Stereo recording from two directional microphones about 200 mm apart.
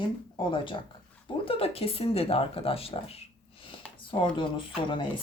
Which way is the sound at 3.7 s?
25° left (ahead or behind).